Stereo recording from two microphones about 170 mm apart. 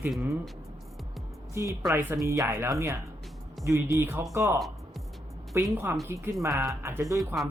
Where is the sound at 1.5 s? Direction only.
20° right (ahead or behind).